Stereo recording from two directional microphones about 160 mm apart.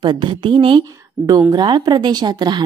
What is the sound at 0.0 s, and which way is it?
Speech, 30° right (ahead or behind).